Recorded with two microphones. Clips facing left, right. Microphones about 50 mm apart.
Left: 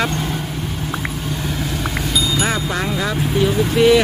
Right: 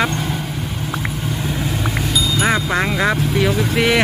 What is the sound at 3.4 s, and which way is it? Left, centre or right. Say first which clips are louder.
Speech: left 5 dB; right.